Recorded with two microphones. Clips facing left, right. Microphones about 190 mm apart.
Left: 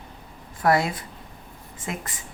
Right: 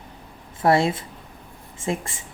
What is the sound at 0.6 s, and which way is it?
Speech, 25° right (ahead or behind).